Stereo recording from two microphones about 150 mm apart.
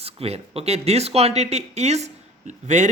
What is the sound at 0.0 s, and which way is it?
Speech, 40° right (ahead or behind).